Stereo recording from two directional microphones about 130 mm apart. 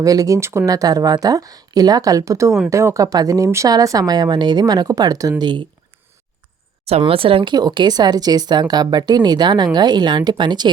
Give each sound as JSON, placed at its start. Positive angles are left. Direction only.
{"t": 0.0, "sound": "a woman's voice", "side_deg": -25}
{"t": 7.0, "sound": "speech", "side_deg": -45}